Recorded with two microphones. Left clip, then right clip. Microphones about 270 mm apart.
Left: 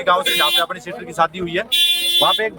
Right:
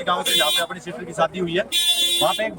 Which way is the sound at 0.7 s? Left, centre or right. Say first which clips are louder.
Left 4 dB; centre.